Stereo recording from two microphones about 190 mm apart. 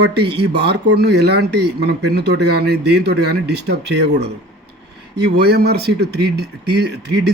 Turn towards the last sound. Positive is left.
turn(degrees=-60)  # may be behind; listen again after turning